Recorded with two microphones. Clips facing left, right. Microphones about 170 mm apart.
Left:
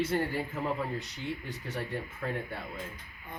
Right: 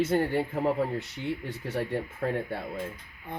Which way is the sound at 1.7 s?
60° right (ahead or behind).